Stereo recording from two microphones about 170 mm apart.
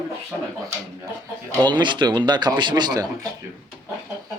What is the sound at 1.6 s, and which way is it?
Speech, 25° right (ahead or behind).